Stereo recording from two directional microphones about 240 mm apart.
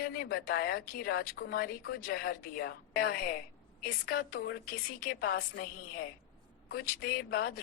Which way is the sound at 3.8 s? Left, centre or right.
Left.